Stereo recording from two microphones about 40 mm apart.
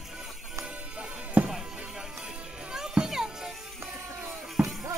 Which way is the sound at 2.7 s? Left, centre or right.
Centre.